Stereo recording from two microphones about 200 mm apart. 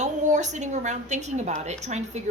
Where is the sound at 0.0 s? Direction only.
35° right (ahead or behind).